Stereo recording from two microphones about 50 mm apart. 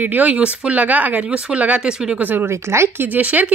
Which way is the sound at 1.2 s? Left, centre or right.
Right.